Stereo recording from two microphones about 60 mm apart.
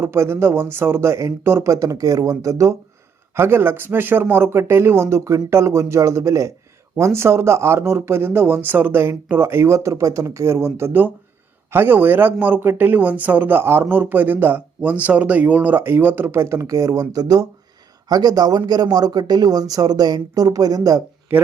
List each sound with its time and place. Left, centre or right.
0.0 s speech: right
1.6 s speech: right
3.3 s speech: right
6.9 s a man's voice: right